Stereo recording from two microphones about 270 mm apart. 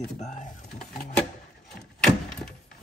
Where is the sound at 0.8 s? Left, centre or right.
Centre.